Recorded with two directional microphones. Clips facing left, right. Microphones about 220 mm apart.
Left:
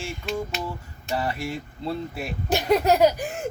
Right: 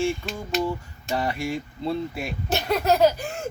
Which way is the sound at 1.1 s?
Centre (ahead or behind).